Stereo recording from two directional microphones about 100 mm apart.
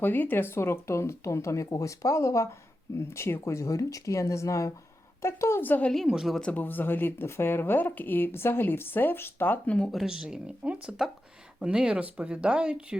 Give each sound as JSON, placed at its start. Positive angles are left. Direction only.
{"t": 0.0, "sound": "speech", "side_deg": 20}
{"t": 5.9, "sound": "a woman's voice", "side_deg": 0}
{"t": 6.4, "sound": "speech", "side_deg": 15}